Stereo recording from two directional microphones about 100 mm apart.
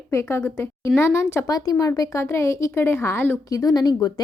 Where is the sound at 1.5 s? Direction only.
35° left (ahead or behind).